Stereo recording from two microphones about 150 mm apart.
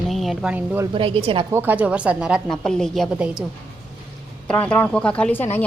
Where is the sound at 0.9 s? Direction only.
35° right (ahead or behind).